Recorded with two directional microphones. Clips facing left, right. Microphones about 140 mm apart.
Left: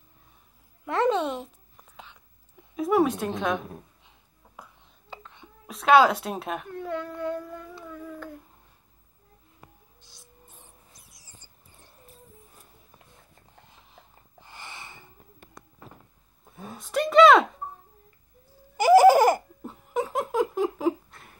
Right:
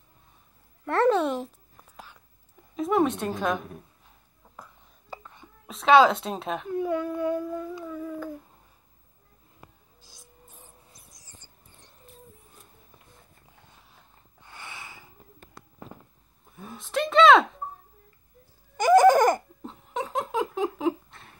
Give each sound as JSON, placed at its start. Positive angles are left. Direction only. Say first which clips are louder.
{"t": 0.8, "sound": "babbling", "louder": "right 2 dB", "side_deg": 0}
{"t": 2.7, "sound": "a woman's voice", "louder": "left 1 dB", "side_deg": 5}
{"t": 5.1, "sound": "whispering", "louder": "right 2 dB", "side_deg": -10}
{"t": 5.7, "sound": "speech", "louder": "right 1 dB", "side_deg": 0}
{"t": 6.7, "sound": "a sound", "louder": "right 6 dB", "side_deg": -10}
{"t": 10.0, "sound": "filing", "louder": "right 2 dB", "side_deg": -10}
{"t": 11.3, "sound": "a sound", "louder": "even", "side_deg": 5}
{"t": 13.7, "sound": "wheeze", "louder": "left 2 dB", "side_deg": 0}
{"t": 16.8, "sound": "speech", "louder": "left 2 dB", "side_deg": 0}
{"t": 18.8, "sound": "laughter", "louder": "left 1 dB", "side_deg": 5}